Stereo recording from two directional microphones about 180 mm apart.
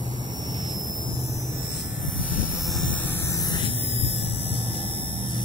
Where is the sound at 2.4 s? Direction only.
Centre (ahead or behind); by 5.4 s 30° left (ahead or behind).